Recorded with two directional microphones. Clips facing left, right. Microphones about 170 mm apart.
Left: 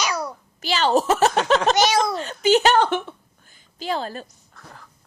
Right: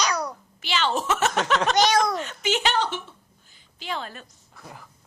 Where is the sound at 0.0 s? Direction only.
5° left (ahead or behind).